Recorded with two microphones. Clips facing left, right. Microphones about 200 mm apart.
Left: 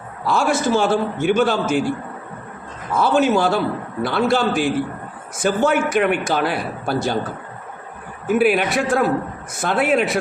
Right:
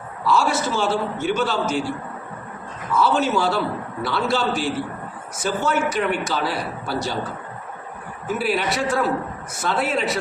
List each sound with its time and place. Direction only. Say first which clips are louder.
0.3 s a man's voice: left 2 dB; 55° left (ahead or behind)
2.9 s a man's voice: left 3 dB; 50° left (ahead or behind)
8.4 s a man's voice: left 6 dB; 55° left (ahead or behind)